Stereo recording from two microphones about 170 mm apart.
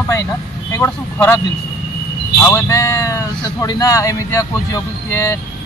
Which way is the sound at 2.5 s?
15° left (ahead or behind).